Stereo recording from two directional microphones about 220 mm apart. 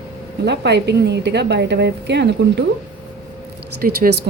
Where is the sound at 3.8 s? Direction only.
45° right (ahead or behind).